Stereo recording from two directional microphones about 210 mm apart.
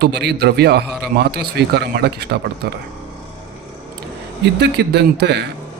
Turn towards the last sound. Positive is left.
turn(degrees=-55)  # may be behind; listen again after turning